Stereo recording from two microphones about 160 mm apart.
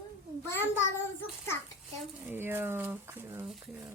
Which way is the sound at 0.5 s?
15° left (ahead or behind).